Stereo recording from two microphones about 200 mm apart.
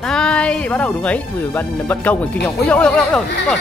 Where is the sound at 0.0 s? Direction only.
5° left (ahead or behind).